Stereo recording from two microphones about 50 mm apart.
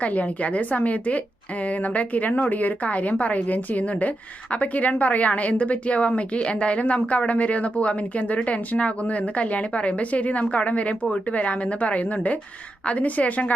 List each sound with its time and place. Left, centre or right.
0.0 s a woman's voice: left